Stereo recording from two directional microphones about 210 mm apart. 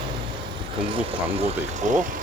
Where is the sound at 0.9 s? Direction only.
25° right (ahead or behind).